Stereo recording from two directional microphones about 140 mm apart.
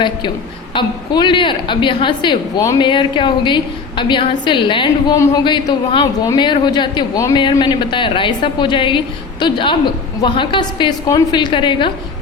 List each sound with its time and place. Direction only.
0.7 s a woman's voice: 35° left (ahead or behind)
5.1 s a woman's voice: 25° left (ahead or behind)